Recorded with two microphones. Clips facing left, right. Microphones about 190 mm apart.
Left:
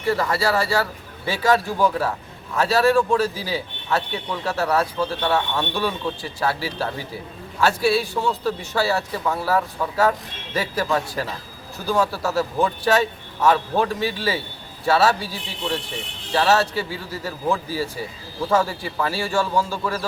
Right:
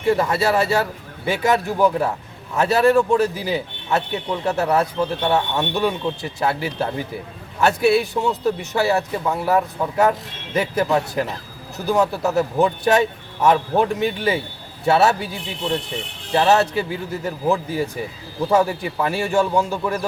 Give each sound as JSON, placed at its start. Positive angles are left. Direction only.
{"t": 0.0, "sound": "a man's voice", "side_deg": -20}